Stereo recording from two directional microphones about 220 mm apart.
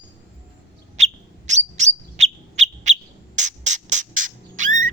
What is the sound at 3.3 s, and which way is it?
Music, 35° right (ahead or behind).